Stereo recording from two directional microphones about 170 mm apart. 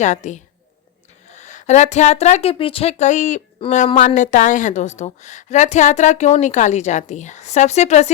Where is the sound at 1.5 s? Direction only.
40° left (ahead or behind).